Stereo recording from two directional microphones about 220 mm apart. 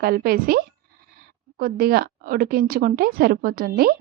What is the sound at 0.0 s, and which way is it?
A woman's voice, 45° right (ahead or behind).